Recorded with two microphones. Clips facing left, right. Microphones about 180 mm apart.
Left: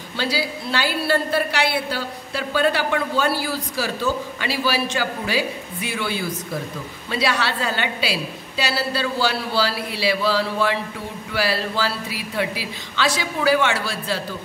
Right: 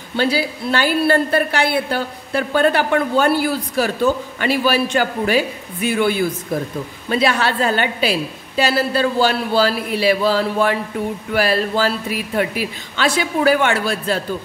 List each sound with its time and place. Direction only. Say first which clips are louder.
0.1 s a woman's voice: right 6 dB; 55° right (ahead or behind)
12.9 s a woman's voice: right 4 dB; 55° right (ahead or behind)